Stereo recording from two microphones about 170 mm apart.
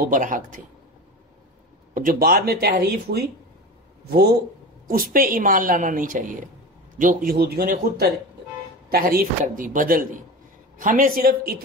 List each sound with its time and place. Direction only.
0.0 s a woman's voice: 50° right (ahead or behind)
2.0 s speech: 55° right (ahead or behind)
4.8 s a woman's voice: 55° right (ahead or behind)